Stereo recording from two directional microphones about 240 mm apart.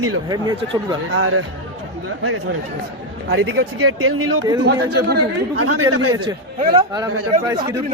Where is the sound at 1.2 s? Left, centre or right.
Right.